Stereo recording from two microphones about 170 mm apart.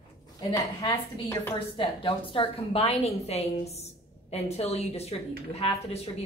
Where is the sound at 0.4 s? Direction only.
20° left (ahead or behind); by 5.2 s 35° left (ahead or behind).